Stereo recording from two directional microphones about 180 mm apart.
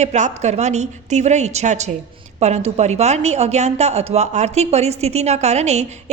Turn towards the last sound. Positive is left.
turn(degrees=-40)  # may be behind; listen again after turning